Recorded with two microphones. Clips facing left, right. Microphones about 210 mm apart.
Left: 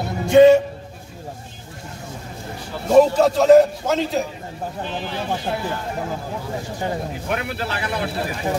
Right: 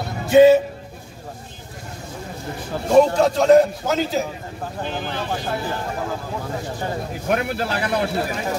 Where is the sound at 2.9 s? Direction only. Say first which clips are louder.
Left 1 dB; centre (ahead or behind).